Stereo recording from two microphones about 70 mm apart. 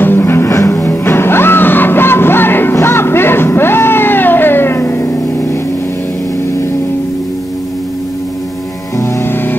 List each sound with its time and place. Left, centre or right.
0.0 s music: left
8.9 s music: left